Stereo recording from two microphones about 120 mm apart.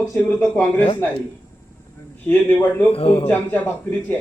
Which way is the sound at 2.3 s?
15° left (ahead or behind).